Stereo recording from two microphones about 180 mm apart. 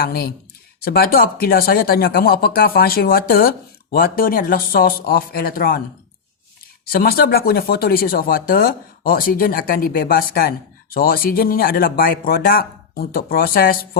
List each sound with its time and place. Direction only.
0.0 s speech: 55° left (ahead or behind)
6.8 s speech: 55° left (ahead or behind)